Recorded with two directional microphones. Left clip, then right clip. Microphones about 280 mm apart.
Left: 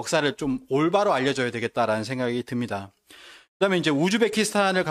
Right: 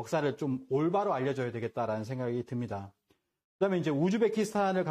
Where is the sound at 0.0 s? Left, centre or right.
Left.